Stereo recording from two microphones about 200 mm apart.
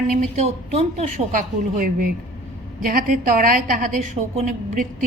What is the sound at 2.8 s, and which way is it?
A woman's voice, 45° right (ahead or behind).